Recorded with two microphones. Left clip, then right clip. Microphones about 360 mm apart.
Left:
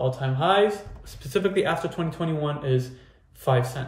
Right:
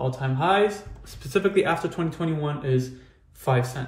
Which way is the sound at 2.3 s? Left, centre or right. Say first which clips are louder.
Left 1 dB; left.